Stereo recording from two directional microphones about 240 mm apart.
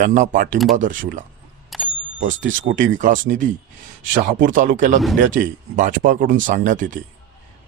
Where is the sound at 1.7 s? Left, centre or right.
Centre.